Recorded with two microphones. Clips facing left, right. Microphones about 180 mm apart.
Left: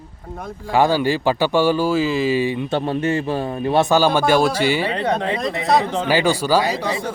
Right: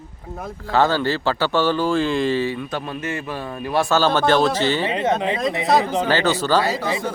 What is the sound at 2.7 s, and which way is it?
A man's voice, 30° left (ahead or behind).